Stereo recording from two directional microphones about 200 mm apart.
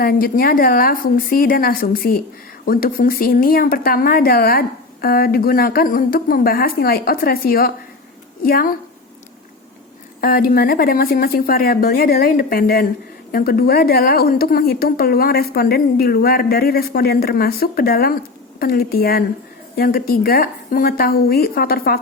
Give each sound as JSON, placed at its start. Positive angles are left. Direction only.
{"t": 0.0, "sound": "a woman's voice", "side_deg": 50}
{"t": 10.2, "sound": "a woman's voice", "side_deg": 45}